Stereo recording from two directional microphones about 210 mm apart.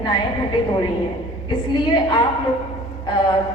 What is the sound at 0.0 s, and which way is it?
A woman's voice, 20° left (ahead or behind).